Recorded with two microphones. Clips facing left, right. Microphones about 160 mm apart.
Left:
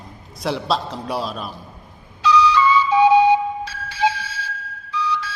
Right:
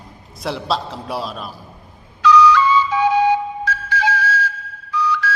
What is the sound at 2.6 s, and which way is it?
Flute, 20° left (ahead or behind).